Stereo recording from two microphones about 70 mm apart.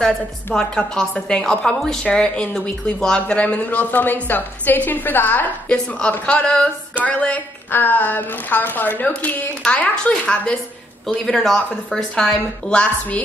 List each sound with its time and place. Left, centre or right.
0.6 s a woman's voice: centre; by 5.5 s left
5.7 s a woman's voice: centre
11.2 s a woman's voice: centre